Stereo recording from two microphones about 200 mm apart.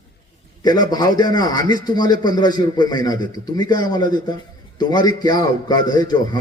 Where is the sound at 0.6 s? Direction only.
20° left (ahead or behind).